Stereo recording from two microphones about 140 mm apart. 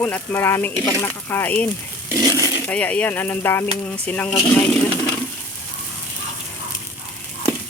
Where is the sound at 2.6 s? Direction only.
10° left (ahead or behind).